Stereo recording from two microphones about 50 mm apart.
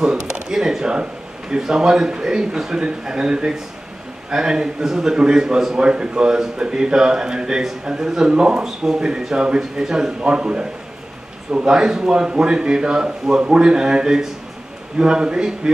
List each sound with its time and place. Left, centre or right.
0.0 s a man's voice: centre